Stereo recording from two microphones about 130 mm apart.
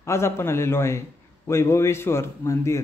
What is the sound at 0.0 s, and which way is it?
A man's voice, 20° left (ahead or behind).